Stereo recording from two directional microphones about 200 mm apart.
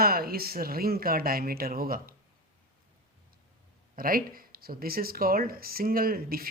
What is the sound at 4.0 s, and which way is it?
Speech, 45° right (ahead or behind).